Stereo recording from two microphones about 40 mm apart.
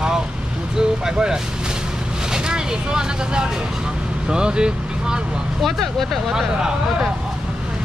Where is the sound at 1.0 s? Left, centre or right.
Centre.